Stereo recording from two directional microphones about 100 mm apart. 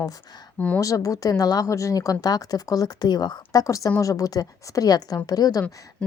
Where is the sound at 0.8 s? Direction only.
35° left (ahead or behind).